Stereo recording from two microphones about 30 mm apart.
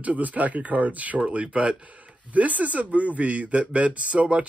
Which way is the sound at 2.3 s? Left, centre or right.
Right.